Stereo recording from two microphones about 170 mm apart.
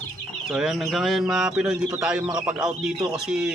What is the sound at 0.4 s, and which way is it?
Speech, centre (ahead or behind).